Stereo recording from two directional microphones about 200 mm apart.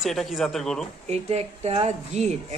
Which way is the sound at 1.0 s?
35° right (ahead or behind).